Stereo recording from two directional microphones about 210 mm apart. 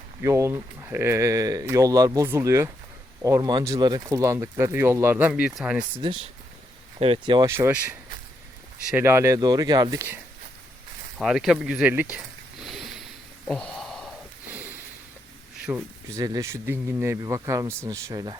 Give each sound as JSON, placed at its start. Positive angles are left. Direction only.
{"t": 0.2, "sound": "speech", "side_deg": -15}
{"t": 6.0, "sound": "speech", "side_deg": -20}
{"t": 11.2, "sound": "speech", "side_deg": 0}
{"t": 12.6, "sound": "a sound", "side_deg": 0}
{"t": 14.5, "sound": "a sound", "side_deg": -10}
{"t": 15.6, "sound": "speech", "side_deg": -10}